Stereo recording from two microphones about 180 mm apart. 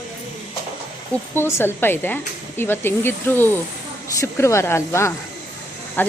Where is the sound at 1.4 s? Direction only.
15° left (ahead or behind).